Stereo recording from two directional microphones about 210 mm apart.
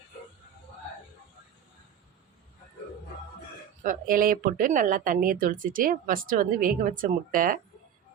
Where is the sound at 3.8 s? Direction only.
40° right (ahead or behind).